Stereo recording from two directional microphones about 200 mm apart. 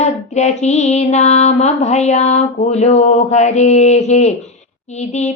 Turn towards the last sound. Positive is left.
turn(degrees=35)  # may be behind; listen again after turning